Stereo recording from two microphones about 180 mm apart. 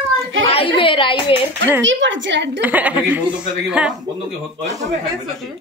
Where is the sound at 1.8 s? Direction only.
90° right.